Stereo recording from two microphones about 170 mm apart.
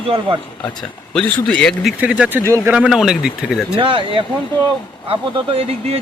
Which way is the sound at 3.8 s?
30° right (ahead or behind).